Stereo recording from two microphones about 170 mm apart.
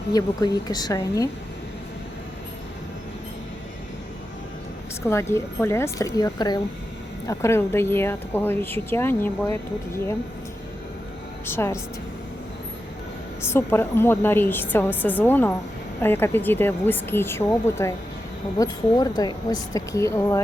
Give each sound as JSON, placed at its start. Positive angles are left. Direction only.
{"t": 0.1, "sound": "speech", "side_deg": 20}
{"t": 5.0, "sound": "speech", "side_deg": 15}
{"t": 11.4, "sound": "speech", "side_deg": 15}
{"t": 13.4, "sound": "speech", "side_deg": 15}